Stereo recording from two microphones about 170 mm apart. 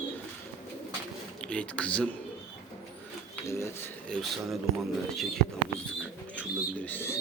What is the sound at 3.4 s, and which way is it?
Speech, 15° left (ahead or behind).